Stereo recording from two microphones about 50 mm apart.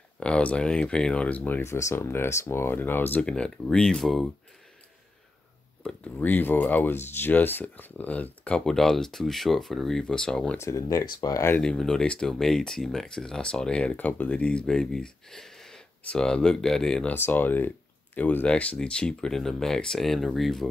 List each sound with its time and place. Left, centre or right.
0.2 s speech: left
1.6 s speech: left
2.0 s speech: left
3.2 s speech: centre
6.1 s speech: left
8.5 s speech: centre
10.6 s speech: left
11.6 s speech: centre
13.9 s speech: left; by 15.8 s centre
16.1 s speech: centre
17.1 s speech: left; by 20.6 s centre